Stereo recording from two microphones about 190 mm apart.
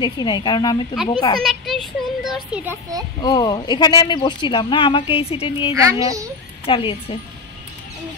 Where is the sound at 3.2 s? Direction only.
20° left (ahead or behind).